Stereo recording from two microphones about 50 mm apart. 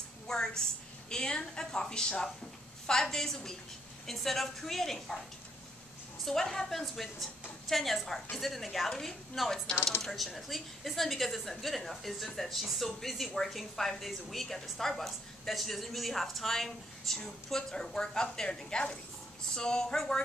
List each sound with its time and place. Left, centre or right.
0.3 s a woman's voice: centre
6.2 s a woman's voice: centre